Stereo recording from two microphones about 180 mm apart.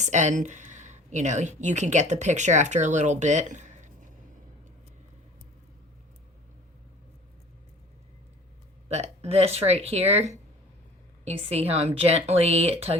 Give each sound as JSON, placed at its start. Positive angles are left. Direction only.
{"t": 0.0, "sound": "speech", "side_deg": -40}
{"t": 8.9, "sound": "speech", "side_deg": -35}